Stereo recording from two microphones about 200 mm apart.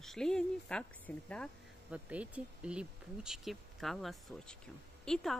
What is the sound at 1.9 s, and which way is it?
Speech, 5° right (ahead or behind).